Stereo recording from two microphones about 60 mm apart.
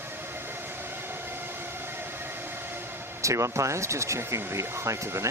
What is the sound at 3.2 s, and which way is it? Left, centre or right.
Speech, right.